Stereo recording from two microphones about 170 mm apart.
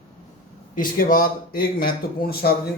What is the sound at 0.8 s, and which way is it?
Speech, 55° left (ahead or behind).